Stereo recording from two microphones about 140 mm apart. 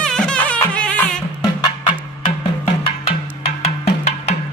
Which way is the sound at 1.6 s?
40° left (ahead or behind).